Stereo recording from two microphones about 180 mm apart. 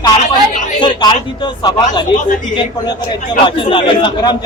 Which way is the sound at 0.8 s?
25° left (ahead or behind).